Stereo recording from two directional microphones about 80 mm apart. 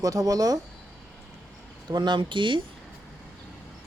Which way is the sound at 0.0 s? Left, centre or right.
Right.